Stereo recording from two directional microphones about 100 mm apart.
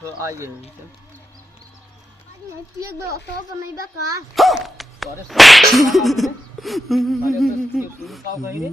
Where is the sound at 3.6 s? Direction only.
30° right (ahead or behind).